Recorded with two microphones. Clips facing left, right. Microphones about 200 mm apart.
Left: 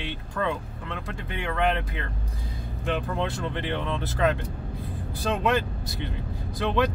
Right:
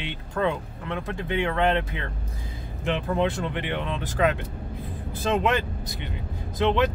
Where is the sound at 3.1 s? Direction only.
15° right (ahead or behind).